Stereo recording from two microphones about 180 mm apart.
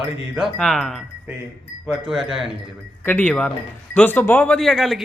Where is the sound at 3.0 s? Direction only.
10° left (ahead or behind).